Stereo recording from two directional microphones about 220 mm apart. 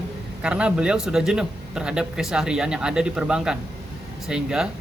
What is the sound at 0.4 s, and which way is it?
A man's voice, 5° right (ahead or behind).